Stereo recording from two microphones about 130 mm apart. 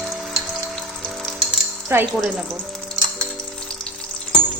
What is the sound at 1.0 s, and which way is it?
Frying, 5° left (ahead or behind).